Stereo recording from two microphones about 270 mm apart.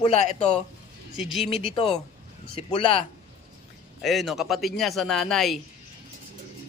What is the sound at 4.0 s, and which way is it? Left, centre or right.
A man's voice, centre.